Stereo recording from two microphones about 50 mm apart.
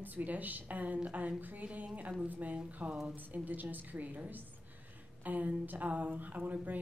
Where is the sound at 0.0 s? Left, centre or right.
Right.